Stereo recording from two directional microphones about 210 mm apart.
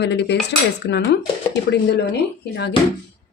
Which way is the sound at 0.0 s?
55° left (ahead or behind).